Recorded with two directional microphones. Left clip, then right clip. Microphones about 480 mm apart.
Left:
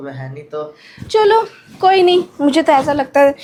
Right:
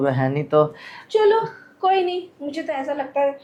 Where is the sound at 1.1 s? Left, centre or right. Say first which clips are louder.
Left 5 dB; left.